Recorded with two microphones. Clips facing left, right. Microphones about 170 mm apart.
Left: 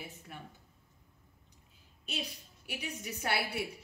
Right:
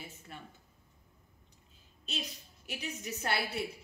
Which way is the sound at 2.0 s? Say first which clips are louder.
Left 1 dB; 10° left (ahead or behind).